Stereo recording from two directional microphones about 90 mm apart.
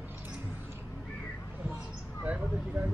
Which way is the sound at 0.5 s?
25° right (ahead or behind).